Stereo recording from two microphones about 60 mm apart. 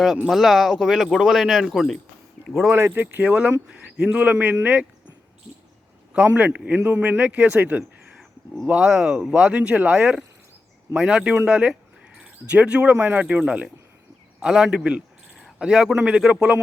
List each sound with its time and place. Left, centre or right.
0.3 s speech: centre
2.7 s speech: right
3.2 s a man's voice: centre
6.2 s speech: right
8.7 s a man's voice: centre